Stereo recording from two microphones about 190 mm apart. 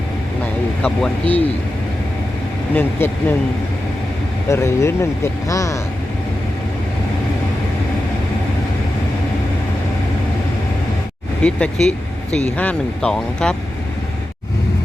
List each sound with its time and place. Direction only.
0.8 s speech: 5° left (ahead or behind)
2.7 s speech: 10° left (ahead or behind)
4.4 s speech: 15° left (ahead or behind)
11.4 s speech: 5° left (ahead or behind)